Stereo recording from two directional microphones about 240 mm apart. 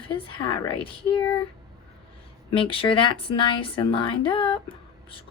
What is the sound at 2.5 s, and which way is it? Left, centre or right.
A woman's voice, left.